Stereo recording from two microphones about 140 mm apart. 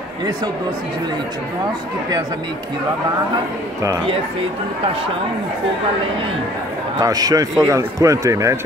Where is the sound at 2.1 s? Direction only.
30° right (ahead or behind).